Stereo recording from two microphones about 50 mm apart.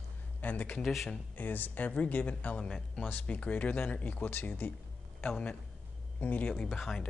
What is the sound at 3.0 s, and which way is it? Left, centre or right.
Speech, left.